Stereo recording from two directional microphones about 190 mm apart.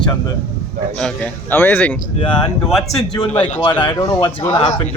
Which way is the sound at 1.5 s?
10° left (ahead or behind).